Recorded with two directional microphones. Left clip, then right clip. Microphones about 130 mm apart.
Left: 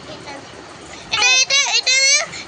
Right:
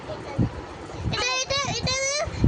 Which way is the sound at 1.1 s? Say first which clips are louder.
Left 11 dB; 40° right (ahead or behind).